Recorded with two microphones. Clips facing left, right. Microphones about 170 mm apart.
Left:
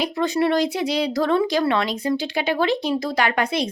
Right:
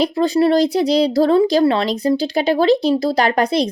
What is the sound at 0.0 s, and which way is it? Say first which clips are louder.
Speech: right 6 dB; 35° right (ahead or behind).